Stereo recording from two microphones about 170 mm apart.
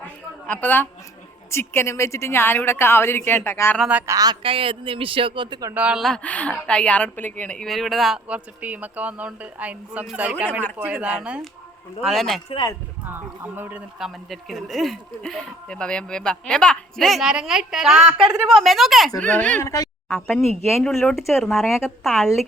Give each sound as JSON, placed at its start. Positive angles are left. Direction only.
{"t": 0.0, "sound": "a sound", "side_deg": 10}
{"t": 1.5, "sound": "a woman's voice", "side_deg": 15}
{"t": 3.8, "sound": "a man's voice", "side_deg": -10}
{"t": 5.7, "sound": "speech", "side_deg": -5}
{"t": 12.5, "sound": "speech", "side_deg": 25}
{"t": 13.1, "sound": "speech", "side_deg": -10}
{"t": 20.1, "sound": "speech", "side_deg": 0}